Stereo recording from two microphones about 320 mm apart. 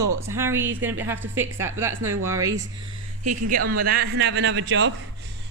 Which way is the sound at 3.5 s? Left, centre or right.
Right.